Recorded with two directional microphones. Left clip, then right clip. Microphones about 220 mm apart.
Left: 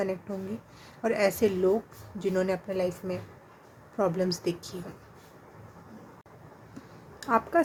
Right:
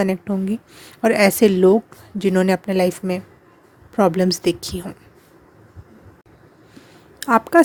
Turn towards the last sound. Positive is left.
turn(degrees=-45)  # may be behind; listen again after turning